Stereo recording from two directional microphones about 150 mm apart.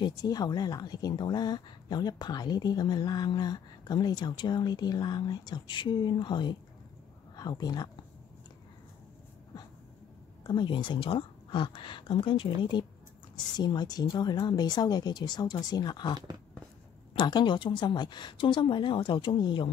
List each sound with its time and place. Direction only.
0.0 s speech: 25° left (ahead or behind)
10.4 s speech: 30° left (ahead or behind)